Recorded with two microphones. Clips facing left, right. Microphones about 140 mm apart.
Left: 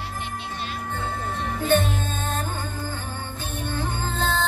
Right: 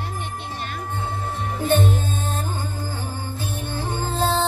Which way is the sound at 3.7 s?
35° right (ahead or behind).